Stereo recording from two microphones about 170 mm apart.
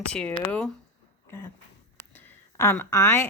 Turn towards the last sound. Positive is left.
turn(degrees=15)  # may be behind; listen again after turning